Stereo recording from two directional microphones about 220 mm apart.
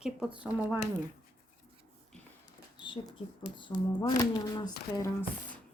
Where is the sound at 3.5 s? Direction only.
20° left (ahead or behind).